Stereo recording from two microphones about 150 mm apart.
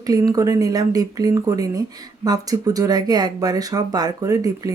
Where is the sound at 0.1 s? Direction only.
25° right (ahead or behind).